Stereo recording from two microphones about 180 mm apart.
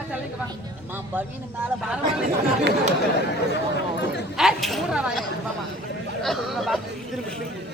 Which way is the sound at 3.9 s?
70° left (ahead or behind).